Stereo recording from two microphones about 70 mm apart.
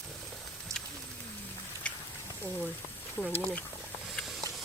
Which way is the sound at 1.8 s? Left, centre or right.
Centre.